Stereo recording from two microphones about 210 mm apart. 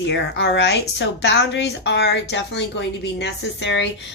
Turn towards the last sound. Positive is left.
turn(degrees=60)  # may be behind; listen again after turning